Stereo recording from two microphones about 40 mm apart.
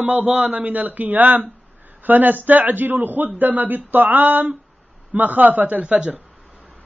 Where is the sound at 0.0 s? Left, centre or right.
Right.